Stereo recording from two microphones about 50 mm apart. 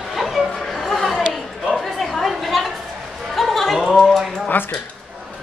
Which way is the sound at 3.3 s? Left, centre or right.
Centre.